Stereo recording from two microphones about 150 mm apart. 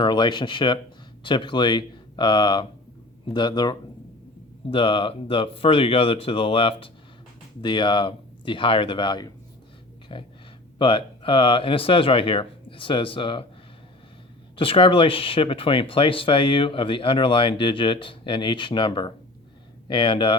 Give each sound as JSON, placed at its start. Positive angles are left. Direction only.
{"t": 0.0, "sound": "speech", "side_deg": 30}
{"t": 14.5, "sound": "speech", "side_deg": 35}